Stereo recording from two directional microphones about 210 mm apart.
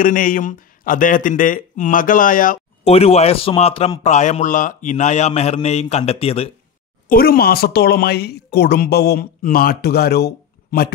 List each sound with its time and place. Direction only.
0.0 s speech: 40° left (ahead or behind)
2.8 s speech: 30° left (ahead or behind)
7.1 s speech: 45° left (ahead or behind)